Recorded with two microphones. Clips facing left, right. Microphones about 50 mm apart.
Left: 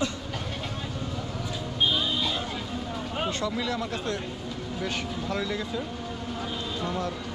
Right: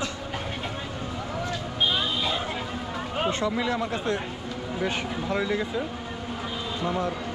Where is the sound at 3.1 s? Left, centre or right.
Right.